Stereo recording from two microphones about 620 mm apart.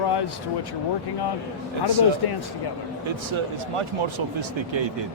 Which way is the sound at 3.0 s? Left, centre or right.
Right.